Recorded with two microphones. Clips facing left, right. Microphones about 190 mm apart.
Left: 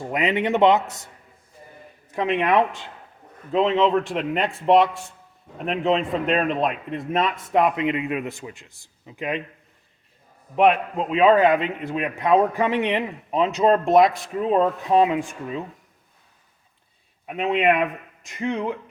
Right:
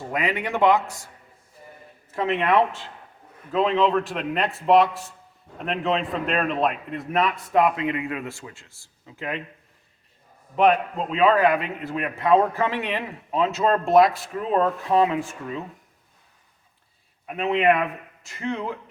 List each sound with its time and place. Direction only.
0.1 s a man's voice: 20° left (ahead or behind)
3.8 s a man's voice: centre (ahead or behind)
7.4 s a man's voice: 20° left (ahead or behind)
10.5 s a man's voice: 15° left (ahead or behind)
17.2 s a man's voice: 20° left (ahead or behind)